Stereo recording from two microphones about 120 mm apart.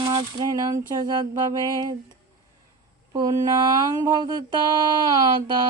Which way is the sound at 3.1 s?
30° right (ahead or behind).